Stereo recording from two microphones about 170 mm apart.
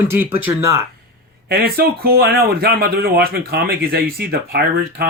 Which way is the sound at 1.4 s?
65° right (ahead or behind).